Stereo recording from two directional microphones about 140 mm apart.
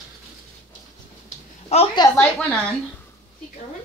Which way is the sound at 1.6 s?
45° left (ahead or behind).